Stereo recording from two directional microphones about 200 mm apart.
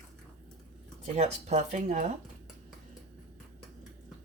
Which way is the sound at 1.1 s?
35° right (ahead or behind).